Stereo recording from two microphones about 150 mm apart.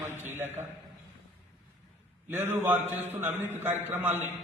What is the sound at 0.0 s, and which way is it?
Speech, 15° right (ahead or behind).